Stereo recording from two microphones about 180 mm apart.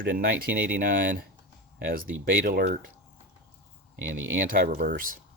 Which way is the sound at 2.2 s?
55° right (ahead or behind).